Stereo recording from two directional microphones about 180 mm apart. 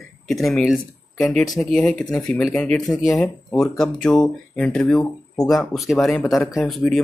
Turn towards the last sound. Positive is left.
turn(degrees=0)  # may be behind; listen again after turning